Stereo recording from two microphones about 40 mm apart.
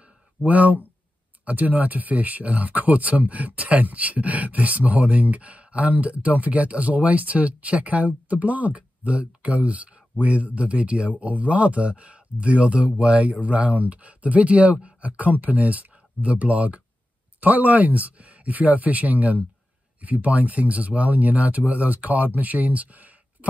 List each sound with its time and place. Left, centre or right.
0.5 s speech: right